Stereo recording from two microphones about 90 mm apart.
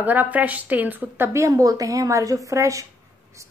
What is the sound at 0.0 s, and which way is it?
A woman's voice, 20° right (ahead or behind).